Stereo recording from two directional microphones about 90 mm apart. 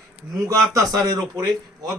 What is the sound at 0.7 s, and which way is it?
Speech, 45° right (ahead or behind).